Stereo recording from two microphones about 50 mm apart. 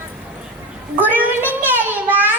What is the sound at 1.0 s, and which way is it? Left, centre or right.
Child singing, right.